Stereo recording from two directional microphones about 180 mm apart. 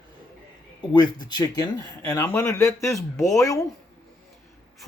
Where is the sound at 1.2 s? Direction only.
20° left (ahead or behind).